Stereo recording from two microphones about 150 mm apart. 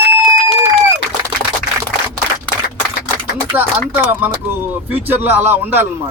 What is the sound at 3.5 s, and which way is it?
A man's voice, 10° right (ahead or behind).